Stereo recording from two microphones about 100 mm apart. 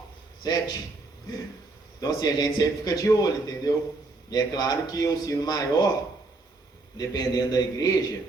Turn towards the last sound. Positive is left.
turn(degrees=40)  # may be behind; listen again after turning